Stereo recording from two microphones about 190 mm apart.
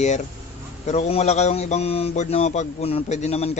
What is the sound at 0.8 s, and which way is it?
Speech, 35° left (ahead or behind).